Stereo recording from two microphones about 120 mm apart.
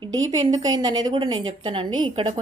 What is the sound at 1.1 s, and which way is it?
A woman's voice, 45° right (ahead or behind).